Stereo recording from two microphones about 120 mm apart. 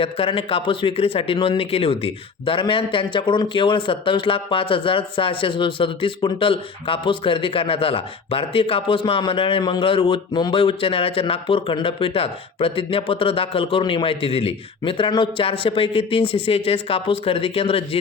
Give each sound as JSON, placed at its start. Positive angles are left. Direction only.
{"t": 0.0, "sound": "speech", "side_deg": 50}